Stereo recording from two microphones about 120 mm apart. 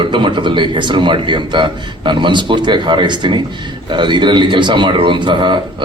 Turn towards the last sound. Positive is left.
turn(degrees=-40)  # may be behind; listen again after turning